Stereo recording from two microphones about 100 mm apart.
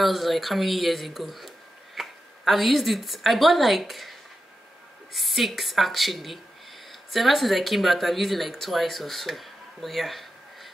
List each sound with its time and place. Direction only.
0.0 s speech: centre (ahead or behind)
5.1 s speech: centre (ahead or behind)